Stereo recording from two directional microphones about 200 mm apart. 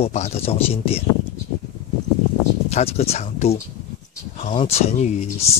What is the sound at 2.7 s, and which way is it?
Speech, 30° left (ahead or behind).